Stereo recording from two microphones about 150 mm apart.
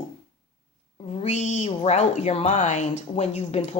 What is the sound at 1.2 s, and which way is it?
Speech, 50° left (ahead or behind).